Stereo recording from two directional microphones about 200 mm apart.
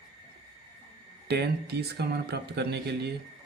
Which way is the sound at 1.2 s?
55° right (ahead or behind).